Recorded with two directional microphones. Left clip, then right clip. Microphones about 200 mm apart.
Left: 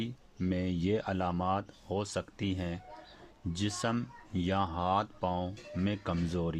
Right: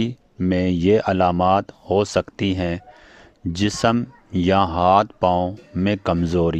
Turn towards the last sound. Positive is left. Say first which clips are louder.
# right 15 dB
turn(degrees=-45)  # may be behind; listen again after turning